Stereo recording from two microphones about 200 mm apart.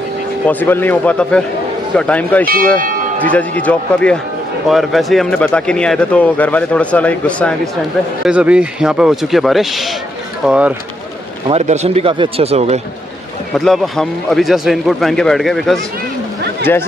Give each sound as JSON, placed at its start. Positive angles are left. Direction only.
{"t": 0.5, "sound": "speech", "side_deg": 10}
{"t": 2.4, "sound": "speech", "side_deg": -45}
{"t": 3.2, "sound": "speech", "side_deg": 10}
{"t": 8.3, "sound": "speech", "side_deg": -5}
{"t": 11.4, "sound": "a man's voice", "side_deg": -30}
{"t": 13.6, "sound": "speech", "side_deg": 0}